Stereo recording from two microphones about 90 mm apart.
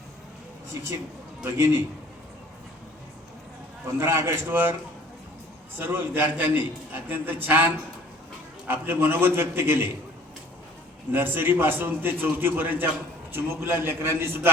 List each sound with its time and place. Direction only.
1.5 s a man's voice: 30° right (ahead or behind)
3.9 s a man's voice: 30° right (ahead or behind)
5.7 s a man's voice: 25° right (ahead or behind)
11.1 s a man's voice: 20° right (ahead or behind)